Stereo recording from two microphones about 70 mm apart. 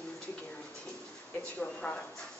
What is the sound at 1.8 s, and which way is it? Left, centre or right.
Speech, centre.